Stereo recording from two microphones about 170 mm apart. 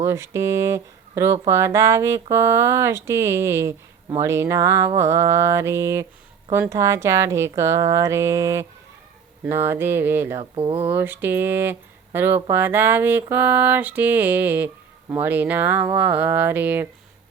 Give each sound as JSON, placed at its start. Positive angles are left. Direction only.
{"t": 0.0, "sound": "speech", "side_deg": -15}